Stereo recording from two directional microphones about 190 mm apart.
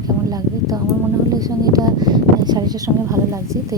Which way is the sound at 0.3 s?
20° right (ahead or behind).